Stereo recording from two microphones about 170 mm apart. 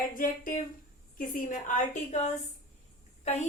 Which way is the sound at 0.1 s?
50° left (ahead or behind).